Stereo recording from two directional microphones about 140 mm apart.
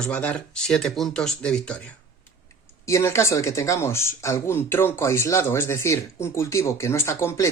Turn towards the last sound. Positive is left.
turn(degrees=20)  # may be behind; listen again after turning